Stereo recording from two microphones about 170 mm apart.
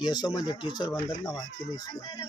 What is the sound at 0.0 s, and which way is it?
Speech, 25° left (ahead or behind).